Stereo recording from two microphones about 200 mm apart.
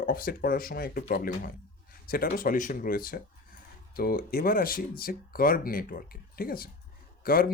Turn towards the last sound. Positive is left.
turn(degrees=45)  # may be behind; listen again after turning